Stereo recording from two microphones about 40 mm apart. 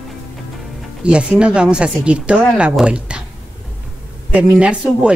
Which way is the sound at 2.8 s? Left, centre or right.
Right.